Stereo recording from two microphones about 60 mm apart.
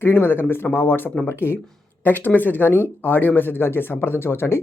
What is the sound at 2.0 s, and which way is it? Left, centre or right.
Speech, left.